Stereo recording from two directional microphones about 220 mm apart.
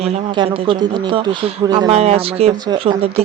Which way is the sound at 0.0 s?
25° right (ahead or behind).